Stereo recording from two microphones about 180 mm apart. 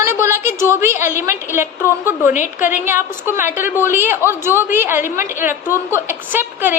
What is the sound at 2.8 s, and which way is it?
A woman's voice, 10° right (ahead or behind).